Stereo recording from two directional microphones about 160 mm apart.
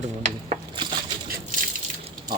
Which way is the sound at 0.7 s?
30° right (ahead or behind).